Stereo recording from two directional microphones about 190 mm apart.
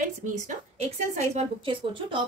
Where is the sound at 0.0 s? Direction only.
40° right (ahead or behind).